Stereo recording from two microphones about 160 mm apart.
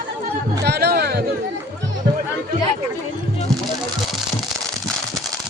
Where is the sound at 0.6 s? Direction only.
90° right.